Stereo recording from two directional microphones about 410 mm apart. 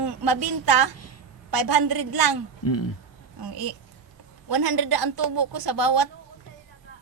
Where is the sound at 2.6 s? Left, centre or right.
Left.